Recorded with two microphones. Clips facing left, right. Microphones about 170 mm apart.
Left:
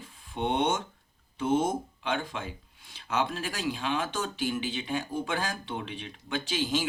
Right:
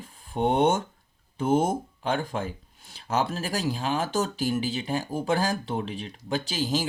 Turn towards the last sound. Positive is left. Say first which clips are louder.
# right 2 dB
turn(degrees=-35)  # may be behind; listen again after turning